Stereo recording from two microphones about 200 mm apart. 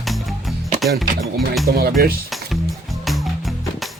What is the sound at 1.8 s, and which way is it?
Speech, 50° right (ahead or behind).